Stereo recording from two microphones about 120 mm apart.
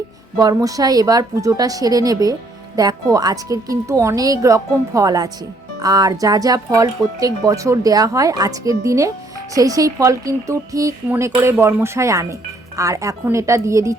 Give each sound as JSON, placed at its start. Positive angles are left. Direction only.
{"t": 0.3, "sound": "a woman's voice", "side_deg": -30}